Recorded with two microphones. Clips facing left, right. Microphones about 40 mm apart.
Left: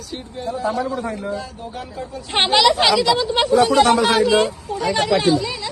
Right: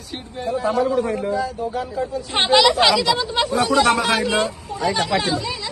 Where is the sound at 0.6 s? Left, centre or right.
Right.